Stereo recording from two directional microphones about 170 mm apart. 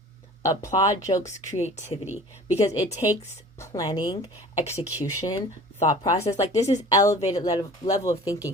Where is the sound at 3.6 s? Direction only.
20° left (ahead or behind).